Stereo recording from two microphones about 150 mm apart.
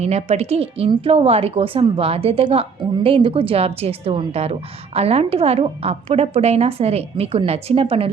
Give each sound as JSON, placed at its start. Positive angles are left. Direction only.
{"t": 0.0, "sound": "a woman's voice", "side_deg": -45}